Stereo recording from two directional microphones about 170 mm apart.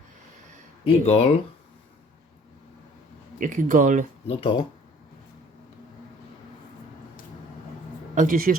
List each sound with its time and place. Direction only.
0.9 s speech: 40° left (ahead or behind)
3.4 s speech: 50° right (ahead or behind)
4.3 s speech: 30° left (ahead or behind)
8.1 s speech: 50° right (ahead or behind)